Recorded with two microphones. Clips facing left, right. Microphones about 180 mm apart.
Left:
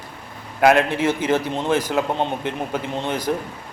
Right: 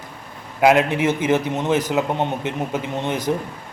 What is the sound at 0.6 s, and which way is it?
A man's voice, 20° right (ahead or behind).